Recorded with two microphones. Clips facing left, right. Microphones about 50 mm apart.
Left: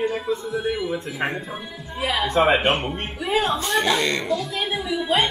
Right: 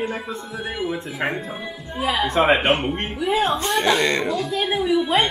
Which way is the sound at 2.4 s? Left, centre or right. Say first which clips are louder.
Even; right.